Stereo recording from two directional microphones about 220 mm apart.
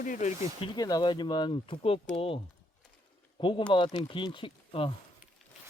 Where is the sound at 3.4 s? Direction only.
25° left (ahead or behind).